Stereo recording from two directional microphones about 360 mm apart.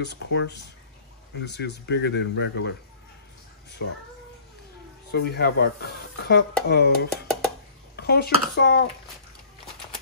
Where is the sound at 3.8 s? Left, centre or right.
Left.